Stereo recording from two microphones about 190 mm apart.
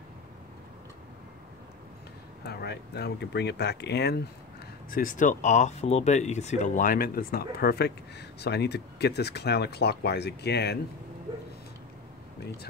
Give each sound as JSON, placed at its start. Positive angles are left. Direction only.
{"t": 2.4, "sound": "speech", "side_deg": 60}
{"t": 4.9, "sound": "speech", "side_deg": 45}